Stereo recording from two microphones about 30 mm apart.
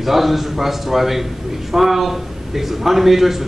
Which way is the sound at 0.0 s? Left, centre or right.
Centre.